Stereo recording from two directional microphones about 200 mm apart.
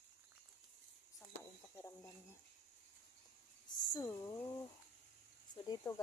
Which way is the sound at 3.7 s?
20° left (ahead or behind).